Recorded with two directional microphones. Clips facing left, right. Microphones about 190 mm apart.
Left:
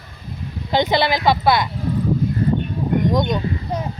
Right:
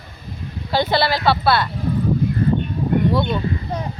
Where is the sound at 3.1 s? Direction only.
15° left (ahead or behind).